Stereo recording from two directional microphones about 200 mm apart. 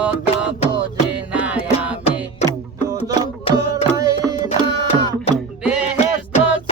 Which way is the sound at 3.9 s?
15° right (ahead or behind).